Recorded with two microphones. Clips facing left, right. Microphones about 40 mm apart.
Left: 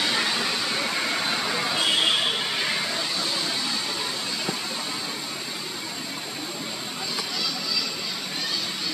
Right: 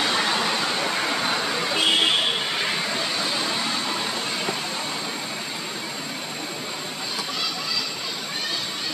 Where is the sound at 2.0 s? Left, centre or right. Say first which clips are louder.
Right 2 dB; centre.